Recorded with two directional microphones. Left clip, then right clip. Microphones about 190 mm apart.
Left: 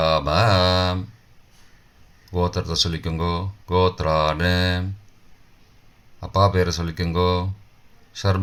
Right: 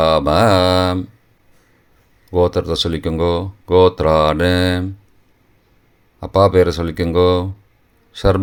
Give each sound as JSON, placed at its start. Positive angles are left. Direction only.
{"t": 0.0, "sound": "mantra", "side_deg": -45}
{"t": 2.3, "sound": "speech", "side_deg": -45}
{"t": 6.1, "sound": "a man's voice", "side_deg": -45}